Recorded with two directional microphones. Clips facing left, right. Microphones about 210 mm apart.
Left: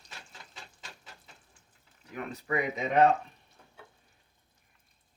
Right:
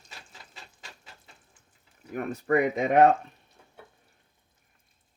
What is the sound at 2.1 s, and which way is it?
Speech, 50° right (ahead or behind).